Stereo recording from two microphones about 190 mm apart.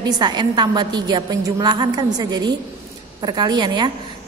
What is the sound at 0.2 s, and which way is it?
A woman's voice, 20° right (ahead or behind).